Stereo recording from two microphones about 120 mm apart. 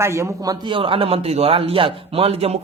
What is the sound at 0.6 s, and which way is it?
Speech, 45° right (ahead or behind).